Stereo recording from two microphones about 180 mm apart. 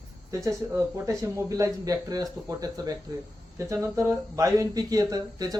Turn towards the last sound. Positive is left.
turn(degrees=-20)  # may be behind; listen again after turning